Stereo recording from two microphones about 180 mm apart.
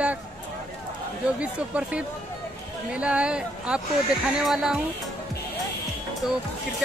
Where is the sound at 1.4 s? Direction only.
5° right (ahead or behind).